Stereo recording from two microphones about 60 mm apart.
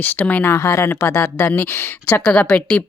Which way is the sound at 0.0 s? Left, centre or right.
Left.